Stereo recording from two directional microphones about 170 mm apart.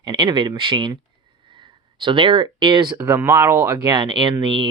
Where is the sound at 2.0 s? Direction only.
30° right (ahead or behind).